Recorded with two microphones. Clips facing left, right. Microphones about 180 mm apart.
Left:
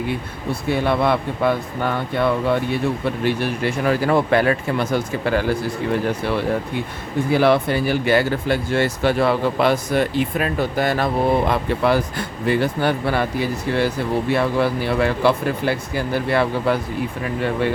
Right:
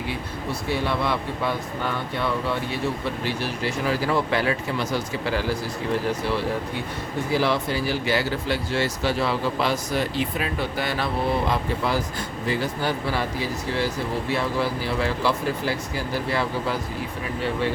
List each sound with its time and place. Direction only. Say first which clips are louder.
0.7 s speech: left 7 dB; 55° left (ahead or behind)
7.3 s speech: left 6 dB; 60° left (ahead or behind)